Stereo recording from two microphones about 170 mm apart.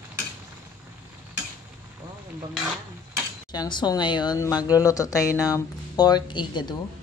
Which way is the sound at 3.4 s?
25° left (ahead or behind).